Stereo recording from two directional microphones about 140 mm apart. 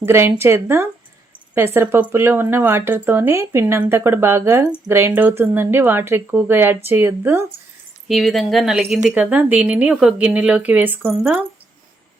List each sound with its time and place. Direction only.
0.0 s speech: 15° right (ahead or behind)
8.0 s speech: centre (ahead or behind)